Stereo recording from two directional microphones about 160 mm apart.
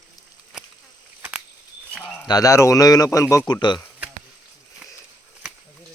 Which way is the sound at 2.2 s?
25° left (ahead or behind).